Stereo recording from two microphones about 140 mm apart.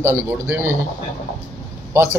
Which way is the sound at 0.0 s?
20° right (ahead or behind).